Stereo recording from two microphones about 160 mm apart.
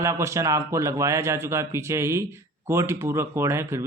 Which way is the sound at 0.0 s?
15° right (ahead or behind).